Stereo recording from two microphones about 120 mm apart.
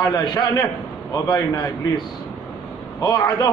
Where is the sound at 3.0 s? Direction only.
25° left (ahead or behind).